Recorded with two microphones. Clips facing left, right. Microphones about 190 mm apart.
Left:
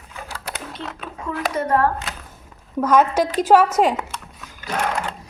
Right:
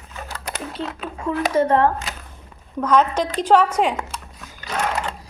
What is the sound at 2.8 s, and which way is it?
Speech, 10° left (ahead or behind).